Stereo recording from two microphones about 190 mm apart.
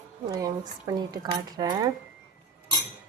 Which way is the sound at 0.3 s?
20° right (ahead or behind).